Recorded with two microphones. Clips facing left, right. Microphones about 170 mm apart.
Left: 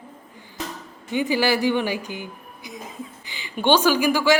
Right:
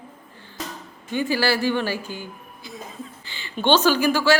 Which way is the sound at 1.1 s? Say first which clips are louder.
Left 1 dB; 15° left (ahead or behind).